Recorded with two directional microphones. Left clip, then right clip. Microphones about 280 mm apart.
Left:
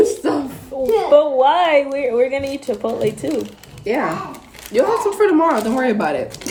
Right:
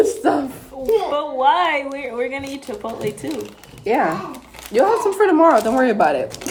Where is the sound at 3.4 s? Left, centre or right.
Centre.